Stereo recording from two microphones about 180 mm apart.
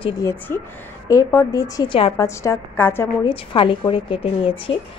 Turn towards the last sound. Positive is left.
turn(degrees=30)  # may be behind; listen again after turning